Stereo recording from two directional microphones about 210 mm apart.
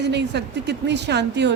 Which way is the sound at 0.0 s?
55° right (ahead or behind).